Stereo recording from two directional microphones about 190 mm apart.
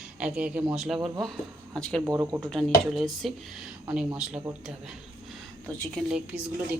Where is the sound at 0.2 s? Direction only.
5° right (ahead or behind).